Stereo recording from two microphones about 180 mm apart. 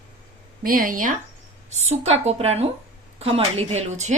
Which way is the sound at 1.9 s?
35° right (ahead or behind).